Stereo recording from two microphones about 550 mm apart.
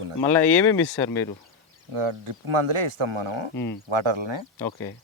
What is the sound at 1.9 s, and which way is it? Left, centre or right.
Speech, right.